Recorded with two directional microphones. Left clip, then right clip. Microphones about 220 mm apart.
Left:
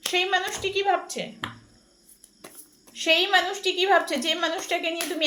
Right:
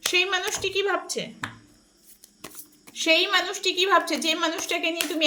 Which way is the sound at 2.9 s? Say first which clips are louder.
Even; 50° right (ahead or behind).